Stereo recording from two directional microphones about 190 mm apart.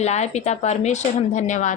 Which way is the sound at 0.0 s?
35° left (ahead or behind).